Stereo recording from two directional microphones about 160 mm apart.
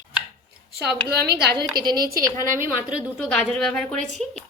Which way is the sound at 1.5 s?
25° right (ahead or behind).